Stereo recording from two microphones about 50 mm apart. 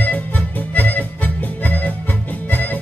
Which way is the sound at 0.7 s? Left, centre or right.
Left.